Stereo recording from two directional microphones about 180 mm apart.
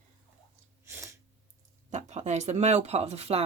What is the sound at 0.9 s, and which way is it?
Sneeze, 15° right (ahead or behind).